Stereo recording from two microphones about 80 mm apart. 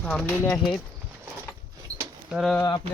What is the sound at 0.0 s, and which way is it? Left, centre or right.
Speech, centre.